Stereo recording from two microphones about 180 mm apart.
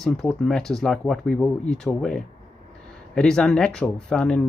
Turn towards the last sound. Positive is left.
turn(degrees=5)  # may be behind; listen again after turning